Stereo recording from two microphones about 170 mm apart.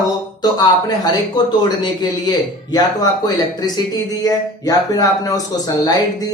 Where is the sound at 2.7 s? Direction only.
25° left (ahead or behind).